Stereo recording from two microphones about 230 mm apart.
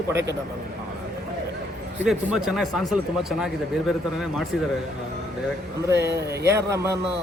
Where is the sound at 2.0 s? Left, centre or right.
Centre.